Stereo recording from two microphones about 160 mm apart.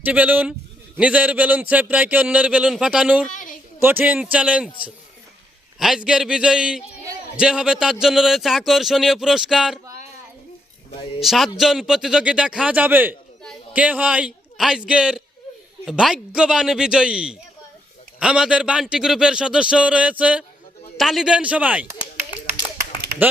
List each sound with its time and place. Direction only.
0.0 s speech: 10° right (ahead or behind)
3.2 s a sound: 55° left (ahead or behind)
3.8 s speech: 10° right (ahead or behind)
5.8 s speech: 5° right (ahead or behind)
11.2 s speech: centre (ahead or behind)